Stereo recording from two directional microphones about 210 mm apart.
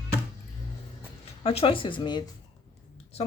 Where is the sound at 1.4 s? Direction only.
30° left (ahead or behind).